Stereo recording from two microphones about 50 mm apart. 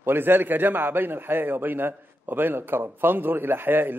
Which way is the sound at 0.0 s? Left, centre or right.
Right.